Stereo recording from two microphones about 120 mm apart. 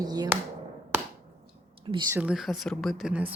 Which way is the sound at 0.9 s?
15° right (ahead or behind).